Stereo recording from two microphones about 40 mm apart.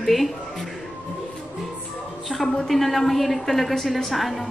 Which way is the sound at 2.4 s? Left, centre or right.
Centre.